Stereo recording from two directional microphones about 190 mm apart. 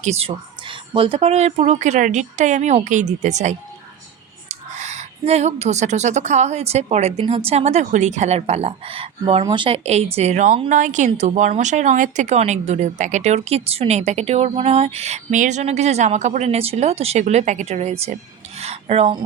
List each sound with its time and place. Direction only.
0.0 s speech: 35° right (ahead or behind)